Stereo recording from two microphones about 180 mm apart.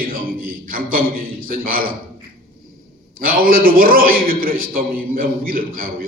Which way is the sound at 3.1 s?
55° right (ahead or behind).